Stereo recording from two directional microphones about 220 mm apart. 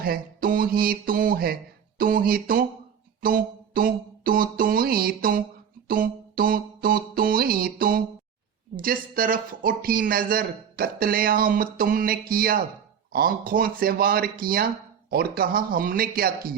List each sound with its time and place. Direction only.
0.0 s speech: 40° right (ahead or behind)